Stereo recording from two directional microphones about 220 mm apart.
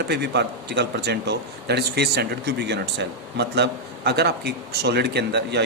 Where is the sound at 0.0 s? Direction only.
50° right (ahead or behind).